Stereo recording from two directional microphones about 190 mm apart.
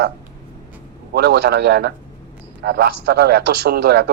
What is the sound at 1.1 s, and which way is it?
A man's voice, 60° right (ahead or behind).